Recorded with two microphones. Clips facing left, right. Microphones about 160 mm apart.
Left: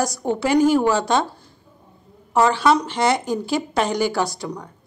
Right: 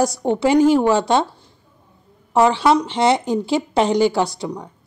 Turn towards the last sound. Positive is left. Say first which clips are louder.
# right 3 dB
turn(degrees=-25)  # may be behind; listen again after turning